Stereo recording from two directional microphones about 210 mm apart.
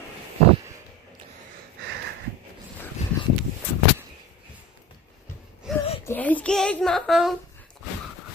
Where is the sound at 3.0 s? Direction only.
30° left (ahead or behind).